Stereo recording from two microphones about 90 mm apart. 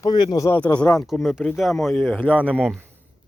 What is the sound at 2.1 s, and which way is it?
Speech, 15° left (ahead or behind).